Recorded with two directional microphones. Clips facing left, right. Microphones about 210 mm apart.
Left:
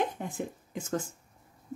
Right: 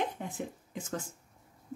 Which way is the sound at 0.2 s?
50° left (ahead or behind).